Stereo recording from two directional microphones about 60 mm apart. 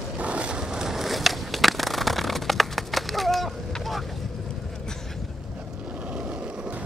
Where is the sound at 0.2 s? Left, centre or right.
Centre.